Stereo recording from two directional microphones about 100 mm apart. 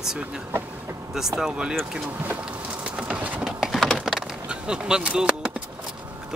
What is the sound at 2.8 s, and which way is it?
Patter, 10° right (ahead or behind).